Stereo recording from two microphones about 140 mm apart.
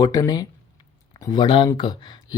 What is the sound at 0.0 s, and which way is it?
Speech, 25° left (ahead or behind).